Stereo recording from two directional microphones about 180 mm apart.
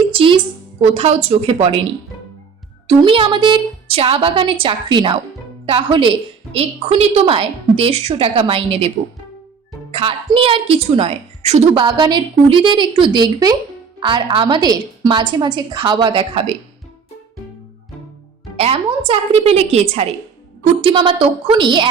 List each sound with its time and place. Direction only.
0.1 s a sound: 30° right (ahead or behind)
0.8 s a woman's voice: 35° right (ahead or behind)
2.8 s a woman's voice: 30° right (ahead or behind)
9.9 s a woman's voice: 30° right (ahead or behind)
18.5 s a woman's voice: 30° right (ahead or behind)